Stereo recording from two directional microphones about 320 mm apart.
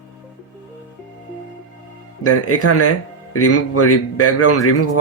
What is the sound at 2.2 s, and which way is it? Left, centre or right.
Speech, left.